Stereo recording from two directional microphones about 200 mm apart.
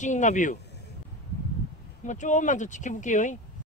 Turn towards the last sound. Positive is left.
turn(degrees=40)  # may be behind; listen again after turning